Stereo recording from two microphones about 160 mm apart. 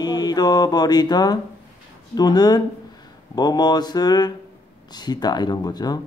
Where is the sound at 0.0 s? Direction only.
25° left (ahead or behind).